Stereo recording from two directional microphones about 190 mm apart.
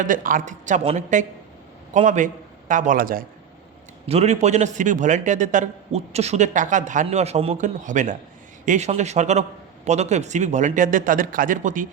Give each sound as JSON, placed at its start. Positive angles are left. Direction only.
{"t": 0.0, "sound": "a man's voice", "side_deg": -45}
{"t": 4.0, "sound": "a man's voice", "side_deg": -35}